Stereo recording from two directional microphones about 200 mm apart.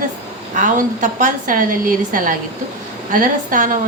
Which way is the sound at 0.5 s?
40° right (ahead or behind).